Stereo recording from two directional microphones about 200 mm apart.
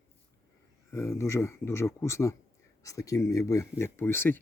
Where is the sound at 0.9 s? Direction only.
15° left (ahead or behind).